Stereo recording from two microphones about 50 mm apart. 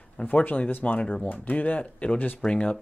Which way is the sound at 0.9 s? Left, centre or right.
Left.